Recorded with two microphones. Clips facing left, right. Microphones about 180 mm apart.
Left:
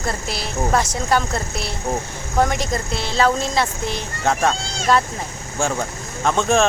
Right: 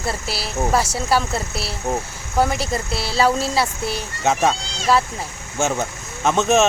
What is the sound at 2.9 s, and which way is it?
A child's voice, 5° right (ahead or behind).